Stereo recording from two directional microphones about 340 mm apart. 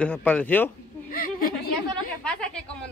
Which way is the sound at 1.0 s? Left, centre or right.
Left.